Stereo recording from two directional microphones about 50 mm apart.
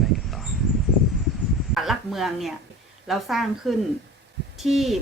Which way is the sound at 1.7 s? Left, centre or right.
Centre.